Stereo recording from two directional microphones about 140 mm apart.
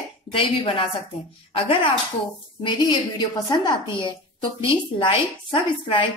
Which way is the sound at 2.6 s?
30° left (ahead or behind).